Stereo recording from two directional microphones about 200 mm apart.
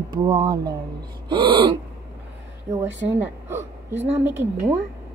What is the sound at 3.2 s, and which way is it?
Speech, 10° right (ahead or behind).